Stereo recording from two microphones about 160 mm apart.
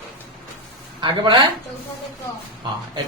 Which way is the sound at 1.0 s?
30° right (ahead or behind).